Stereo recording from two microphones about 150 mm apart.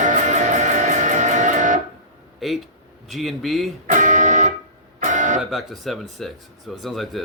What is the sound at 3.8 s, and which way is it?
Music, 55° right (ahead or behind).